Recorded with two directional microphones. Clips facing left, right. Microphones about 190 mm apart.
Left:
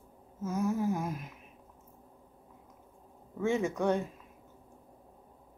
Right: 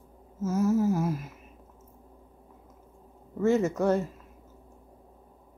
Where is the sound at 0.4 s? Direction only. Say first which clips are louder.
Right 6 dB; 5° right (ahead or behind).